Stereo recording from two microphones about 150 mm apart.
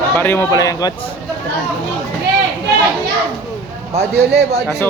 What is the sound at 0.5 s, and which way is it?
Speech, 25° left (ahead or behind).